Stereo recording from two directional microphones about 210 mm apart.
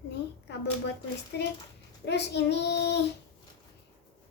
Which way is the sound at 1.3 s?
50° left (ahead or behind).